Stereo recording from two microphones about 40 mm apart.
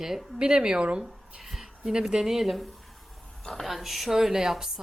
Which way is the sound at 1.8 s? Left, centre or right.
Centre.